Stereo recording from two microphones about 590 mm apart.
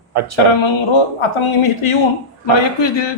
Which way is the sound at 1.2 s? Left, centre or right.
Left.